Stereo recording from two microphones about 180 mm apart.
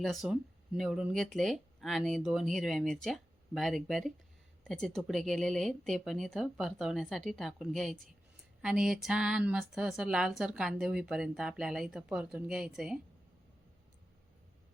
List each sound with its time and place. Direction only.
0.0 s speech: centre (ahead or behind)